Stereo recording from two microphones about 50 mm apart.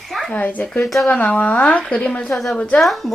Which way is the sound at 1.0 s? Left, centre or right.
Left.